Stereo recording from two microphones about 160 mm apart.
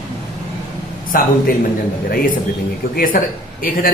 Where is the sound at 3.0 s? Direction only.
65° left (ahead or behind).